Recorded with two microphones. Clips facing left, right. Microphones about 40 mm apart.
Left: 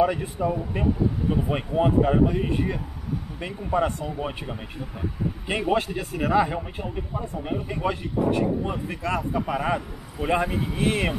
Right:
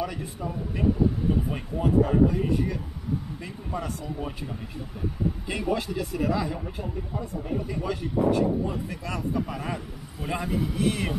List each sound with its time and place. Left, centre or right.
0.0 s speech: left